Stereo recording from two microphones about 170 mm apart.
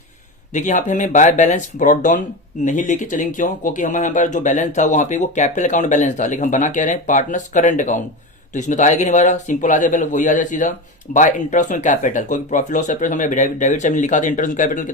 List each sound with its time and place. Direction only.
0.5 s a man's voice: 45° left (ahead or behind)